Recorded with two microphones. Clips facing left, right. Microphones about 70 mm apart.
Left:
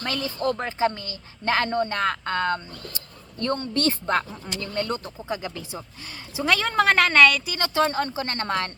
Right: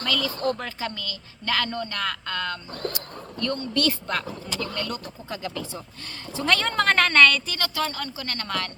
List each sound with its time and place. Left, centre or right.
0.0 s speech: left
5.3 s speech: centre
6.3 s a woman's voice: centre
7.6 s speech: left